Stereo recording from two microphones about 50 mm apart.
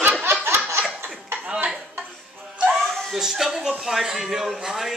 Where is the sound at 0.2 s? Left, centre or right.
Right.